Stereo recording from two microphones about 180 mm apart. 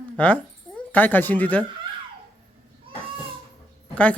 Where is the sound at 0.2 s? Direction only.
10° left (ahead or behind).